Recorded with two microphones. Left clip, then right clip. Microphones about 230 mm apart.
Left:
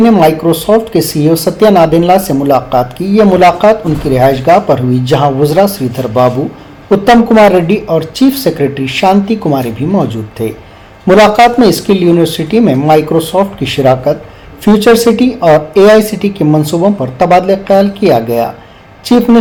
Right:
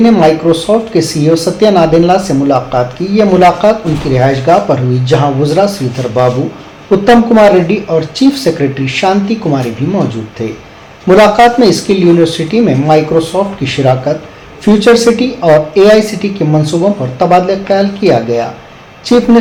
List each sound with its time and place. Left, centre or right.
0.0 s speech: left
11.0 s speech: left